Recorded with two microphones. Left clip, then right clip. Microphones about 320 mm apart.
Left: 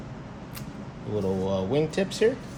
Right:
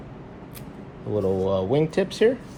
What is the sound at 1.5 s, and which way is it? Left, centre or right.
Speech, right.